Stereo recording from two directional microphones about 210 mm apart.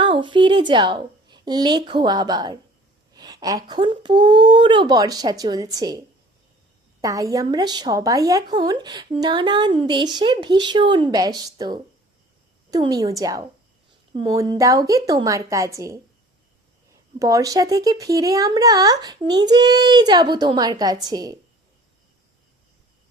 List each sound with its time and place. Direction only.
0.0 s a woman's voice: 20° right (ahead or behind)
7.0 s a woman's voice: 15° right (ahead or behind)